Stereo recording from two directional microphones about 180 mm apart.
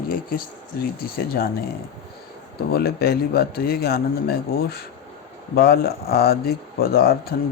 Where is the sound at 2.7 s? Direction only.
60° left (ahead or behind).